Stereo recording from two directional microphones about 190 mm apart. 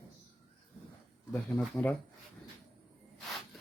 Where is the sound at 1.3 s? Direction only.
Centre (ahead or behind).